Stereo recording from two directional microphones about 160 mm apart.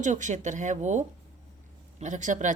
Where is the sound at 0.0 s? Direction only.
50° right (ahead or behind).